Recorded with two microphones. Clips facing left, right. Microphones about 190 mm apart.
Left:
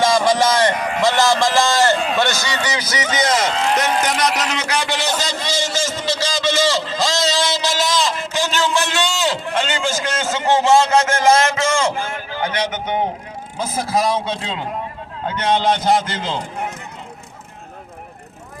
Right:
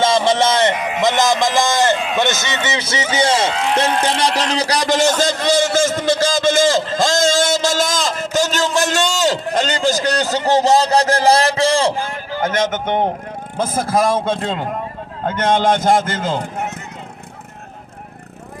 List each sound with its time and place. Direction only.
0.0 s a sound: 25° right (ahead or behind)
0.8 s sheep: 5° right (ahead or behind)
1.0 s a man's voice: 20° right (ahead or behind)
3.5 s speech: centre (ahead or behind)
4.0 s a man's voice: 30° right (ahead or behind); by 16.5 s 50° right (ahead or behind)